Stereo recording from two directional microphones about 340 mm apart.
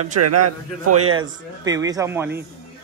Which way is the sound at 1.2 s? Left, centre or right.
Centre.